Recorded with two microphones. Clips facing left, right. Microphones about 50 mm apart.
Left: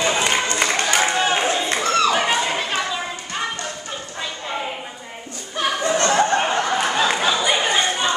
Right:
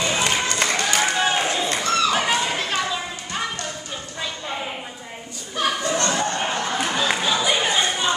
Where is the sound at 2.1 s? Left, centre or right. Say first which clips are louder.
Left 2 dB; centre.